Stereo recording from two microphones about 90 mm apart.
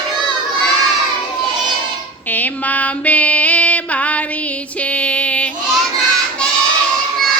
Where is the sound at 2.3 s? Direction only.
20° left (ahead or behind).